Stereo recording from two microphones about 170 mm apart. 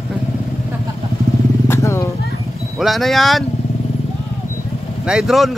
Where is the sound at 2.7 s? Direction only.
Centre (ahead or behind).